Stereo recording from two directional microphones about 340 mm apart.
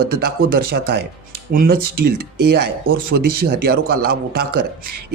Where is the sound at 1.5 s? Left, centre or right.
Right.